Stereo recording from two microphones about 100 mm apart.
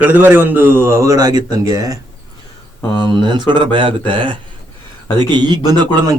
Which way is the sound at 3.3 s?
55° right (ahead or behind).